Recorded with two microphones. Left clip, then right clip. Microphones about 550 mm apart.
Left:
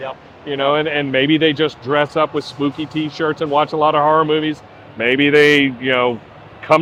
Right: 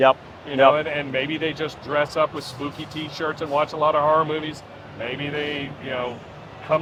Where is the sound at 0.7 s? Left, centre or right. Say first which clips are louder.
Left 5 dB; left.